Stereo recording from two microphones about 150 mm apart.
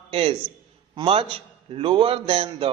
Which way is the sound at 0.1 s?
40° right (ahead or behind).